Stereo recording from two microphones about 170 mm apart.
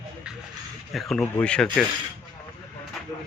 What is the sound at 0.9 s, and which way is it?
Speech, centre (ahead or behind).